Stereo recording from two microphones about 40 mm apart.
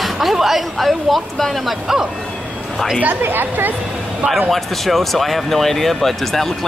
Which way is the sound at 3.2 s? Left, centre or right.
Right.